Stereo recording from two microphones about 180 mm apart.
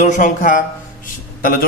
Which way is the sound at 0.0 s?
45° left (ahead or behind).